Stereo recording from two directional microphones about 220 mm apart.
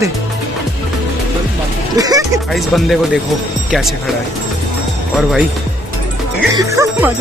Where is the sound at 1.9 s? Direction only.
15° right (ahead or behind).